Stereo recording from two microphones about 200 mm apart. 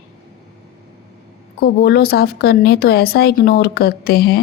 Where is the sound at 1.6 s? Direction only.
50° left (ahead or behind).